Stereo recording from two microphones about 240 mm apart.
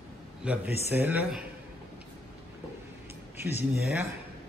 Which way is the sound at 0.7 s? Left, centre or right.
Left.